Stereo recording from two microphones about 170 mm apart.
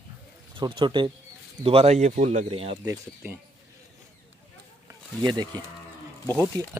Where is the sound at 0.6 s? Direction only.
30° right (ahead or behind).